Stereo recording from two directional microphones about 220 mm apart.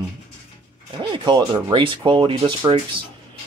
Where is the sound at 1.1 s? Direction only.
20° right (ahead or behind).